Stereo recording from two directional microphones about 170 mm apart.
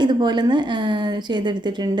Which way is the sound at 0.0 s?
25° right (ahead or behind).